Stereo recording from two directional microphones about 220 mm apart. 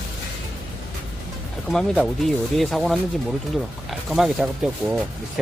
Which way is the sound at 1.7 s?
Centre (ahead or behind).